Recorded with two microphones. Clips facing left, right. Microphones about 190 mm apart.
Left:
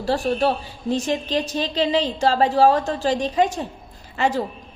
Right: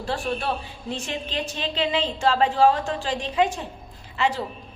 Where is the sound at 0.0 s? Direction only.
40° left (ahead or behind).